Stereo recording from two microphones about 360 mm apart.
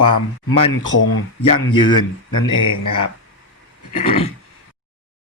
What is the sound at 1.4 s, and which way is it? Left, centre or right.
Speech, centre.